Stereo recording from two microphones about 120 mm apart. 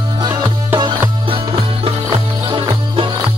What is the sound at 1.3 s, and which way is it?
Music, 50° right (ahead or behind).